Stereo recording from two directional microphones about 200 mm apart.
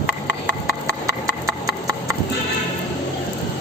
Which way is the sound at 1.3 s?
15° right (ahead or behind).